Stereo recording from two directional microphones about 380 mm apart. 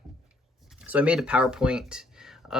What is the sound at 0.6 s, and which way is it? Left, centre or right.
Speech, centre.